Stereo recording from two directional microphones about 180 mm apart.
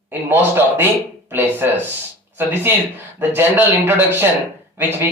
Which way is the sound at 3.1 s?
10° right (ahead or behind).